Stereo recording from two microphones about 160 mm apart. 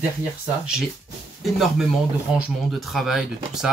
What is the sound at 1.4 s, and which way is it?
Speech, centre (ahead or behind).